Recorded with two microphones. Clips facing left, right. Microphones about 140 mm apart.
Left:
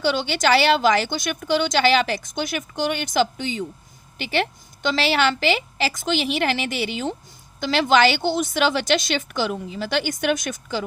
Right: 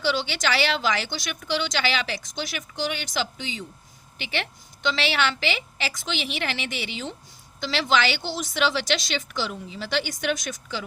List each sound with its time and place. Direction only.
0.0 s a woman's voice: 45° left (ahead or behind)